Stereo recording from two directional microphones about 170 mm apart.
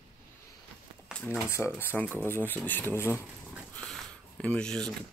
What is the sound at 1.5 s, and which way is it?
Speech, 15° left (ahead or behind).